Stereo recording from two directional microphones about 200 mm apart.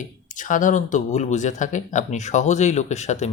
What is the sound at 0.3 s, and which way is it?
Speech, 40° left (ahead or behind).